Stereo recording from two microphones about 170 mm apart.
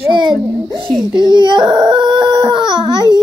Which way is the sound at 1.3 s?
25° right (ahead or behind).